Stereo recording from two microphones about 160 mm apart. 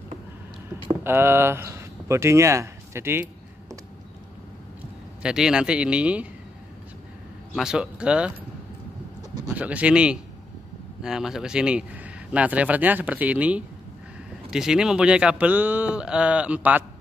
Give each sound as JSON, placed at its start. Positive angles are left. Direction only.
{"t": 1.0, "sound": "speech", "side_deg": -15}
{"t": 5.2, "sound": "speech", "side_deg": -5}
{"t": 7.5, "sound": "speech", "side_deg": -5}
{"t": 9.5, "sound": "speech", "side_deg": -10}